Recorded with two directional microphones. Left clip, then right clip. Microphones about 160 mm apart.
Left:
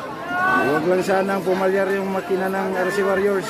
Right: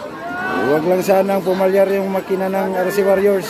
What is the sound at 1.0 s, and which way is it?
A man's voice, 15° right (ahead or behind).